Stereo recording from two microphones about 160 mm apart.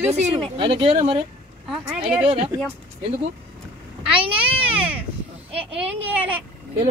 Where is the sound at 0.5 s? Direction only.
30° right (ahead or behind).